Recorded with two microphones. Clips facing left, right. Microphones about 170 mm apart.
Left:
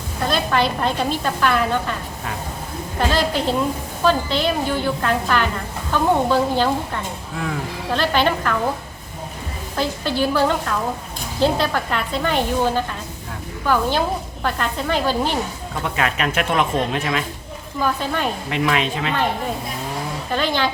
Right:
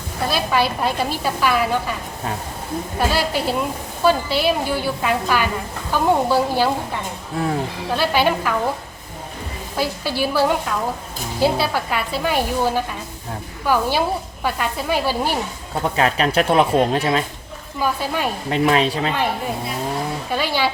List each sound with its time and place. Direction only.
0.3 s a woman's voice: 10° right (ahead or behind)
3.0 s a woman's voice: 10° right (ahead or behind)
7.3 s speech: 35° right (ahead or behind)
7.9 s a woman's voice: 10° right (ahead or behind)
9.7 s a woman's voice: 10° right (ahead or behind)
15.8 s speech: 35° right (ahead or behind)
17.7 s a woman's voice: 10° right (ahead or behind)
18.5 s speech: 35° right (ahead or behind)
20.3 s a woman's voice: 10° right (ahead or behind)